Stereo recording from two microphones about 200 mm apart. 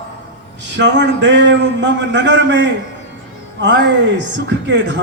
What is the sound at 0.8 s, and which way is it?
A man's voice, 60° right (ahead or behind).